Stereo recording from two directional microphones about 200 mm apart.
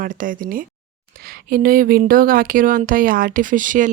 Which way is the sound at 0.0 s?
40° right (ahead or behind).